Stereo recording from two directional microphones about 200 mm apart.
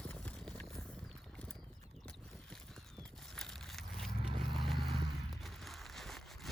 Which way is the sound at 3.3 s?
Centre (ahead or behind).